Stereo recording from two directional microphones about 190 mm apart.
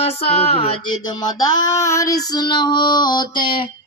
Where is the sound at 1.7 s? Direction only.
15° left (ahead or behind).